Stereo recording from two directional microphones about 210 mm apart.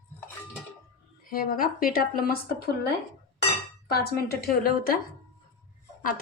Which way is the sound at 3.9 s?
45° left (ahead or behind).